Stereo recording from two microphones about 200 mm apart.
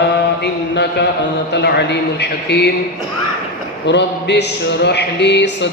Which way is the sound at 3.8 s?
60° left (ahead or behind).